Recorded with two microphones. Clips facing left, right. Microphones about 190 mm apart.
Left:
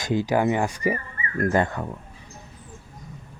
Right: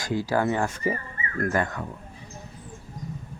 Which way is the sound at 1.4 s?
25° left (ahead or behind).